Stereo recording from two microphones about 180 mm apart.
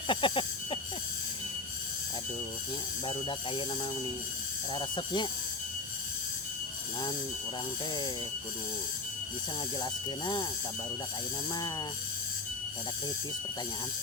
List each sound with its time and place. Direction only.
0.1 s a sound: 30° left (ahead or behind)
3.1 s speech: 30° left (ahead or behind)
4.7 s speech: 30° left (ahead or behind)
9.8 s speech: 25° left (ahead or behind)